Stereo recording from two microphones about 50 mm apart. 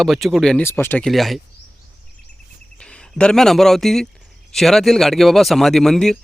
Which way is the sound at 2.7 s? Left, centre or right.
Centre.